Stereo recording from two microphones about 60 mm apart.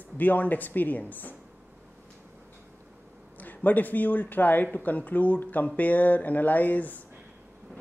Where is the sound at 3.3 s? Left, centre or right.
Left.